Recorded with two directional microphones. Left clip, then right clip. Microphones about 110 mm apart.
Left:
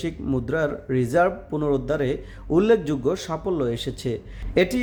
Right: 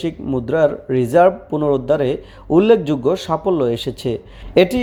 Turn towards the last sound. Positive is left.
turn(degrees=-25)  # may be behind; listen again after turning